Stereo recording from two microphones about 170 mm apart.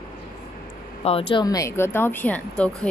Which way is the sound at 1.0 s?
30° left (ahead or behind).